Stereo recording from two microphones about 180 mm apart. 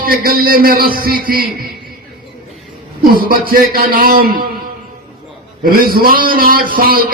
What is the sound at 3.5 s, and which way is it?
Speech, 55° right (ahead or behind).